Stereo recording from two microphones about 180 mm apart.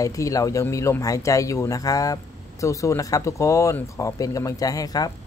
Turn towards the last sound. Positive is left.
turn(degrees=20)  # may be behind; listen again after turning